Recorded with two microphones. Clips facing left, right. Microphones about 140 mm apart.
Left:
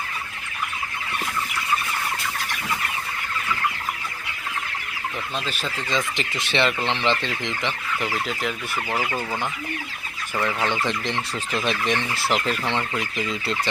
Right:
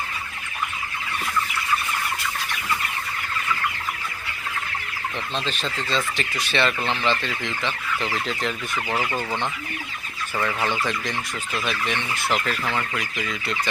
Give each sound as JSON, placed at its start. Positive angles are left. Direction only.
{"t": 5.5, "sound": "speech", "side_deg": 10}
{"t": 10.7, "sound": "speech", "side_deg": 20}